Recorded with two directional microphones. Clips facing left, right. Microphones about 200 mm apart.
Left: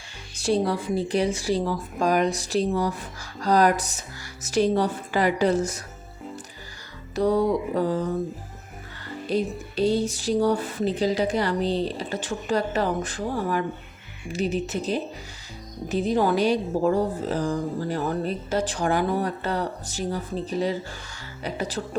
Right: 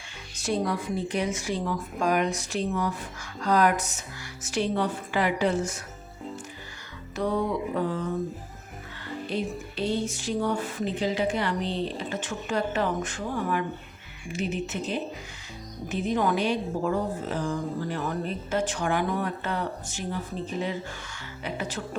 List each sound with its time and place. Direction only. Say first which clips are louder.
0.4 s a woman's voice: left 4 dB; 30° left (ahead or behind)
7.2 s a woman's voice: left 5 dB; 35° left (ahead or behind)
9.3 s a woman's voice: left 6 dB; 40° left (ahead or behind)